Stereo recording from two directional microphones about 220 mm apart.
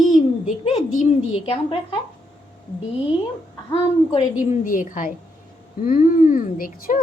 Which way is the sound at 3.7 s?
30° left (ahead or behind).